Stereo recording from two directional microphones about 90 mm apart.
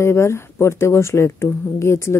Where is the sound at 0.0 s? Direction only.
30° left (ahead or behind).